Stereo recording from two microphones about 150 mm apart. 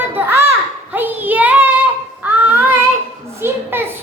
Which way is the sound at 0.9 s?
10° right (ahead or behind).